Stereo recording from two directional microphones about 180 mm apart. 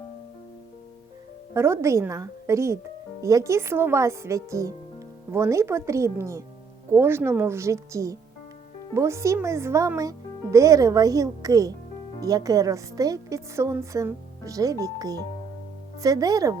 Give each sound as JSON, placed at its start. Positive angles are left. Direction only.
{"t": 1.5, "sound": "a woman's voice", "side_deg": -15}